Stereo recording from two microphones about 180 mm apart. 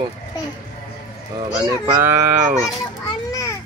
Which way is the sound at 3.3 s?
20° left (ahead or behind).